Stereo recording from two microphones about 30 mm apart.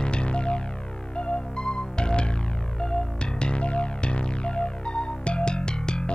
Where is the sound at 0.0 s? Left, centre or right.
Left.